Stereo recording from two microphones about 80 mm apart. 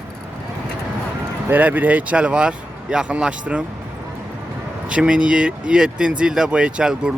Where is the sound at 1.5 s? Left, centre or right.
Right.